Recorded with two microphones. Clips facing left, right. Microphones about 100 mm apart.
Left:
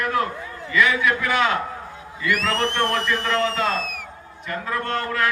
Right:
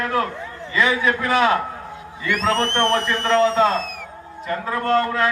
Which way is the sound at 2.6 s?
5° left (ahead or behind).